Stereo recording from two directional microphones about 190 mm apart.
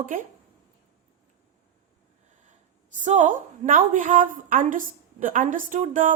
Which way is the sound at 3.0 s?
40° right (ahead or behind).